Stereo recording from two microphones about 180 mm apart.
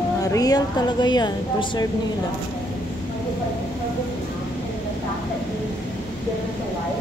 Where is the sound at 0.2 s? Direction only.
20° left (ahead or behind).